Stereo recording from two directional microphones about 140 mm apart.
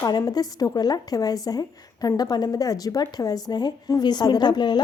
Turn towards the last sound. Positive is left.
turn(degrees=30)  # may be behind; listen again after turning